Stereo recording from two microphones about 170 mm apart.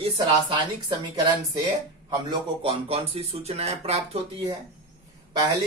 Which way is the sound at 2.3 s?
35° right (ahead or behind).